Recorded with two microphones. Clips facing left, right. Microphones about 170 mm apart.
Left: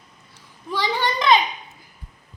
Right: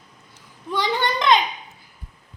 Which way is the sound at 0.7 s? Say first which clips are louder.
Right 1 dB; 5° left (ahead or behind).